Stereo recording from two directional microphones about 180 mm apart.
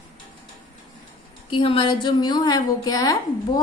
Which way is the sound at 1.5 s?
30° left (ahead or behind).